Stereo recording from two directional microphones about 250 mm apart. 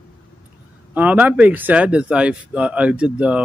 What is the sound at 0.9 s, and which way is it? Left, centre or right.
A man's voice, centre.